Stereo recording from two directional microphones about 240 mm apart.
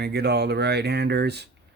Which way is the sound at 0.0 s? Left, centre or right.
Right.